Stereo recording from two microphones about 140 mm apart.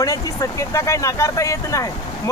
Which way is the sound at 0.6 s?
20° left (ahead or behind).